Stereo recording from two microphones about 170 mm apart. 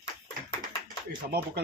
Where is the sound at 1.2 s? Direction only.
55° right (ahead or behind).